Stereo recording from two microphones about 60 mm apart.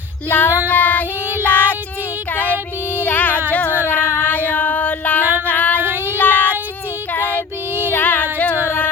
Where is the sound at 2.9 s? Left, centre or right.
Left.